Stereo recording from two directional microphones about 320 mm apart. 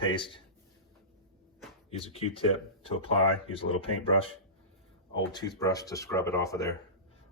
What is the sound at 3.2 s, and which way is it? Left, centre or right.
Speech, left.